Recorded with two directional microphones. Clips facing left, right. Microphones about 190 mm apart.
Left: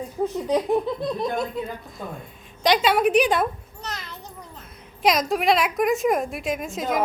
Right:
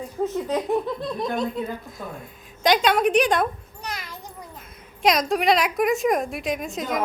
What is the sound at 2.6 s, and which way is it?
Speech, centre (ahead or behind).